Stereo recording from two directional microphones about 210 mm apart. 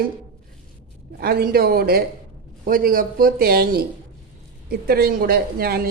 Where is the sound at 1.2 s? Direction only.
45° right (ahead or behind).